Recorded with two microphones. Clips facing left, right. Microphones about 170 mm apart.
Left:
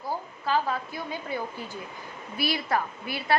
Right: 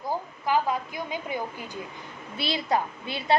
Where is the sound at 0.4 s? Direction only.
15° right (ahead or behind).